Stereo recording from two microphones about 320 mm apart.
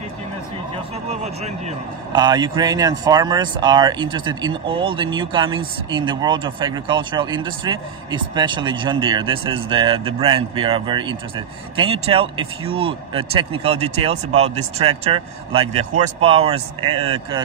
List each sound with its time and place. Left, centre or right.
2.1 s speech: centre